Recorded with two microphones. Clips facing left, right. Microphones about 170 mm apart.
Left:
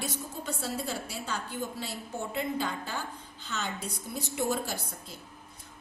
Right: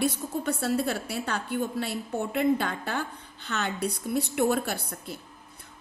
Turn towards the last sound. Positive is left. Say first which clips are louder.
# right 5 dB
turn(degrees=-65)  # may be behind; listen again after turning